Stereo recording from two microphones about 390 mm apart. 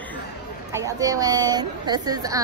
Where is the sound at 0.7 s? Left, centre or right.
Centre.